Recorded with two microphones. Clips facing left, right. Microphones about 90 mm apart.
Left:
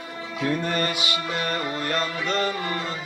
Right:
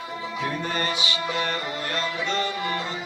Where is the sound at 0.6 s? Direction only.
55° left (ahead or behind).